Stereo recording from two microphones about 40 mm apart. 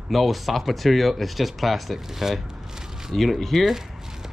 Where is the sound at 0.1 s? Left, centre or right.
Centre.